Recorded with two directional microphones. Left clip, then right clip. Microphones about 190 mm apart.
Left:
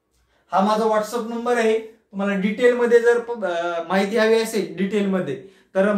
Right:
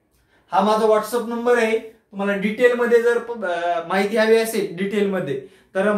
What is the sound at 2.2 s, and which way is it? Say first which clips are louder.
Speech: right 2 dB; 25° left (ahead or behind).